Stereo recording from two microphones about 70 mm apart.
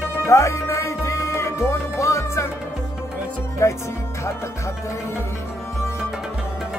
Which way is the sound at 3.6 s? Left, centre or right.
Left.